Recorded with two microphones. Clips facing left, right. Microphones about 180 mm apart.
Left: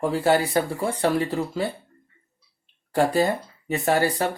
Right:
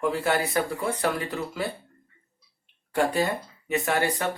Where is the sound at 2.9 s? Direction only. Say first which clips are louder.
Left 4 dB; 35° left (ahead or behind).